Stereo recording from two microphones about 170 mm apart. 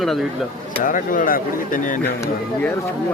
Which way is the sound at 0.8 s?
50° left (ahead or behind).